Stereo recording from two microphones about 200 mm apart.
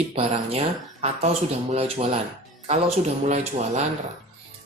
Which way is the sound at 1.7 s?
30° right (ahead or behind).